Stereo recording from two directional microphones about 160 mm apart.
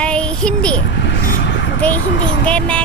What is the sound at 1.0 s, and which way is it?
Vehicle, 90° left.